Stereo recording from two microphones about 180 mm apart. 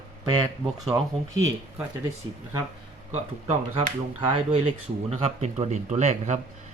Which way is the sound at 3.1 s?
40° right (ahead or behind).